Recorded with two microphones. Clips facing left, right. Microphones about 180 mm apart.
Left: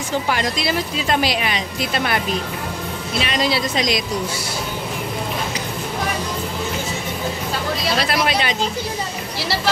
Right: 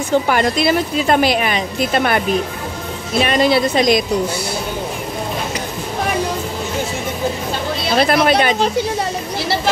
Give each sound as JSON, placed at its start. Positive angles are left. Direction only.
{"t": 0.3, "sound": "a woman's voice", "side_deg": -55}
{"t": 3.2, "sound": "a woman's voice", "side_deg": -50}
{"t": 8.0, "sound": "a woman's voice", "side_deg": -55}